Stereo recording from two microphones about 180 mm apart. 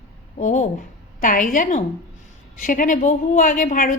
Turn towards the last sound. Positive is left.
turn(degrees=50)  # may be behind; listen again after turning